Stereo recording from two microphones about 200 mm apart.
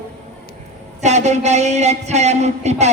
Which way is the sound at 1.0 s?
35° right (ahead or behind).